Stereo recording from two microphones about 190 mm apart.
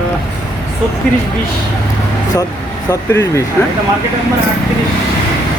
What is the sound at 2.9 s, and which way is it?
Speech, 15° left (ahead or behind).